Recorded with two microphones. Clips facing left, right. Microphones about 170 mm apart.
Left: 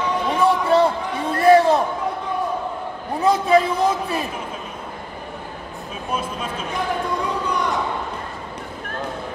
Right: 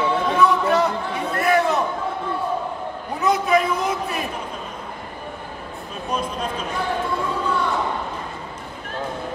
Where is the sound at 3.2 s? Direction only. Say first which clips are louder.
Left 3 dB; 30° left (ahead or behind).